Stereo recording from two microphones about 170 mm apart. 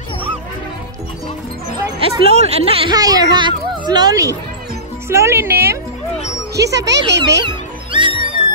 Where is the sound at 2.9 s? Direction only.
20° right (ahead or behind).